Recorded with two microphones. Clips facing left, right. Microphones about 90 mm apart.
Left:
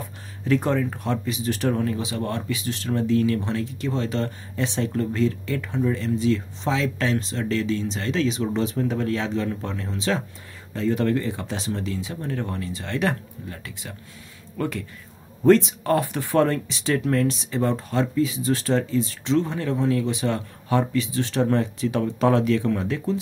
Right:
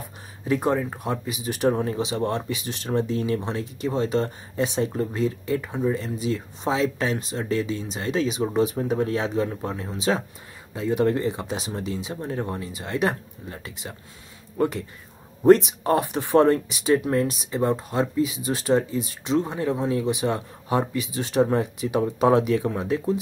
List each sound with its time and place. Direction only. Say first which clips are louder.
0.5 s speech: left 1 dB; 15° right (ahead or behind)
1.7 s speech: right 3 dB; 25° right (ahead or behind)